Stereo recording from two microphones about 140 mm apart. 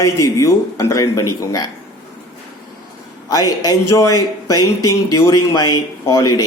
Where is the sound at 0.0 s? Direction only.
25° left (ahead or behind).